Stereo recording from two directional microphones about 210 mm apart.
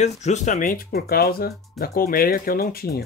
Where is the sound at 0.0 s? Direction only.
35° left (ahead or behind).